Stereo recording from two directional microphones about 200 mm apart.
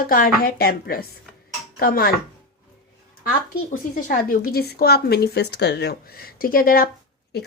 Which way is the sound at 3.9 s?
45° left (ahead or behind).